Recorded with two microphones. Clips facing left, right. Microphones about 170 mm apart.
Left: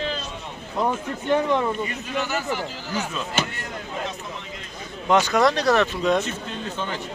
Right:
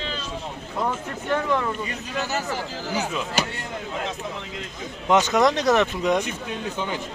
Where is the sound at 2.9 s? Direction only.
10° right (ahead or behind).